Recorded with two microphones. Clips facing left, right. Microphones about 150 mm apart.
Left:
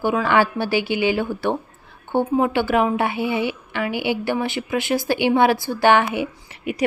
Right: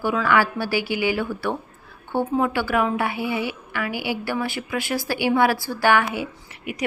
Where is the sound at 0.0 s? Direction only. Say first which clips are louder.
Left 2 dB; 25° left (ahead or behind).